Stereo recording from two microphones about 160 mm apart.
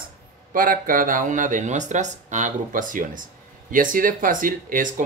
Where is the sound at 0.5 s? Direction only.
60° right (ahead or behind).